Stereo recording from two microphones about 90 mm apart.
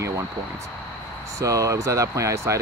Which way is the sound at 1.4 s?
40° right (ahead or behind).